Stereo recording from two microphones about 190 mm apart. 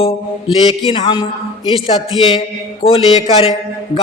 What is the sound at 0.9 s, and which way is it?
Speech, 25° left (ahead or behind).